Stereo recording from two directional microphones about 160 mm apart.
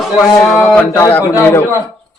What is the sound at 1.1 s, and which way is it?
Speech, 15° left (ahead or behind).